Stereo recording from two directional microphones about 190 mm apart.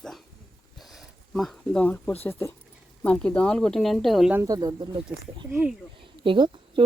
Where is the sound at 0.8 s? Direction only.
Centre (ahead or behind).